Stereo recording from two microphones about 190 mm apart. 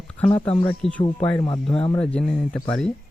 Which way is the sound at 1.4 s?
25° left (ahead or behind).